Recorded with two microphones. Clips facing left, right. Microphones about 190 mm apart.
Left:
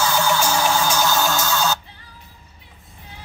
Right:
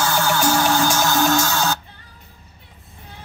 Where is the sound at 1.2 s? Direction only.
55° right (ahead or behind).